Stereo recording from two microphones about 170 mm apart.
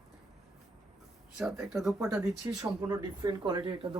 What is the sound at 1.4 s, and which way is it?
Speech, centre (ahead or behind).